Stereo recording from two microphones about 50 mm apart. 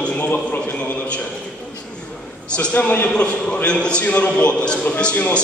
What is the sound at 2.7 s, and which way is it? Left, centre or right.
Speech, left.